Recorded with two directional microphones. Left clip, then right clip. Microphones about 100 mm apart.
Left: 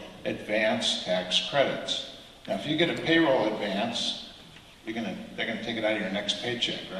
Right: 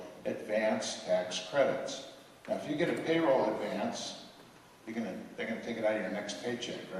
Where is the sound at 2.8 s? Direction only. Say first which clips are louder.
Left 7 dB; 50° left (ahead or behind).